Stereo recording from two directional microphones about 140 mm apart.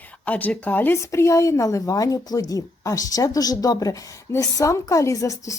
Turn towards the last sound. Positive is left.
turn(degrees=25)  # may be behind; listen again after turning